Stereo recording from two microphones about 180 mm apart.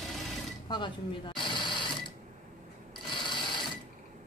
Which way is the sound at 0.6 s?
25° left (ahead or behind).